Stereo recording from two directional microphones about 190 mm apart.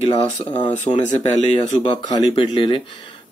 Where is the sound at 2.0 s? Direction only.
25° left (ahead or behind).